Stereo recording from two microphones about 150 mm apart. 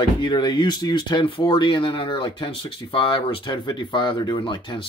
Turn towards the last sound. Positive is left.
turn(degrees=30)  # may be behind; listen again after turning